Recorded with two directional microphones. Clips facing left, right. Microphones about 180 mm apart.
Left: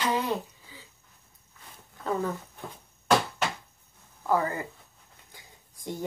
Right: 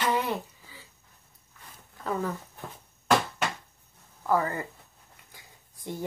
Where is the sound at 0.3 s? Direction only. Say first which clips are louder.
Left 1 dB; 15° left (ahead or behind).